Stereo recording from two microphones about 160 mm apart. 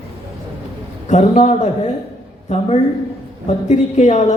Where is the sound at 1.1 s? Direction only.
45° left (ahead or behind).